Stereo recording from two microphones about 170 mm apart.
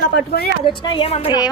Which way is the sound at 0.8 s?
30° left (ahead or behind).